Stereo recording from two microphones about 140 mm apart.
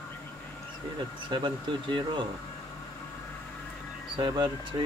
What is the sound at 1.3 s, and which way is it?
Speech, 35° right (ahead or behind).